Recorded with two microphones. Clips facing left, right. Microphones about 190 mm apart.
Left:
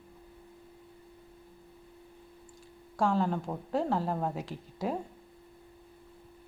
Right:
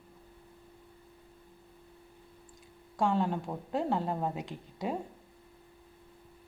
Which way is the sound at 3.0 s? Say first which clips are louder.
Left 1 dB; centre (ahead or behind).